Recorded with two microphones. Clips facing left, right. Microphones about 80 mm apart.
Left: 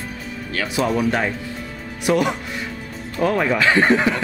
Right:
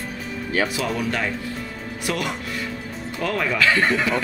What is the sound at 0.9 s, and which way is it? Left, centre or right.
Speech, left.